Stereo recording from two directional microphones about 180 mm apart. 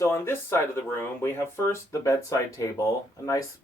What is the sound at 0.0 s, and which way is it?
Speech, 15° left (ahead or behind).